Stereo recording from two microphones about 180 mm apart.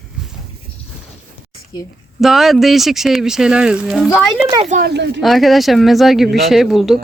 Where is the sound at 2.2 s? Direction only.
Centre (ahead or behind).